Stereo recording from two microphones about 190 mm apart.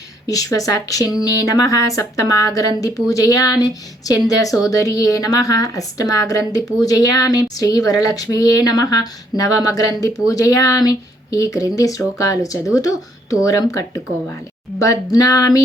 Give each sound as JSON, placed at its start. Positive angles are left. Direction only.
{"t": 0.3, "sound": "a woman's voice", "side_deg": 20}